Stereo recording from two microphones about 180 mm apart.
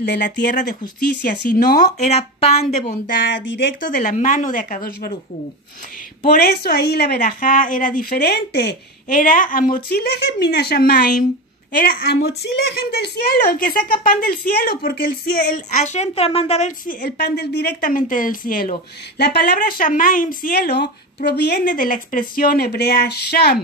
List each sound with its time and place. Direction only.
0.0 s speech: 70° left (ahead or behind)
0.6 s a woman's voice: 50° left (ahead or behind)
2.1 s a woman's voice: 35° left (ahead or behind)
3.1 s speech: 65° left (ahead or behind)
3.8 s a woman's voice: 50° left (ahead or behind)
6.2 s a woman's voice: 60° left (ahead or behind)